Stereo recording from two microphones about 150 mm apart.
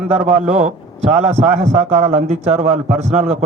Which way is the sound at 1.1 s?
45° right (ahead or behind).